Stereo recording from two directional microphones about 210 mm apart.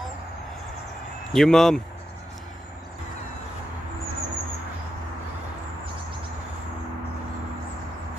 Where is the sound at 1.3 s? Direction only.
Centre (ahead or behind).